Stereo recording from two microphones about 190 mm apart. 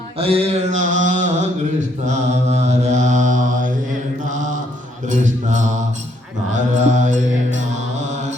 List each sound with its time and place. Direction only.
0.2 s mantra: 30° right (ahead or behind)